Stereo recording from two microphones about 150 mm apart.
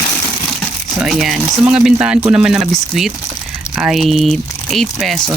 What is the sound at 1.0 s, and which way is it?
Speech, centre (ahead or behind).